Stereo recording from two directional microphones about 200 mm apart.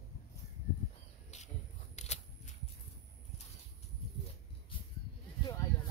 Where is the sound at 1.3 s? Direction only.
35° left (ahead or behind).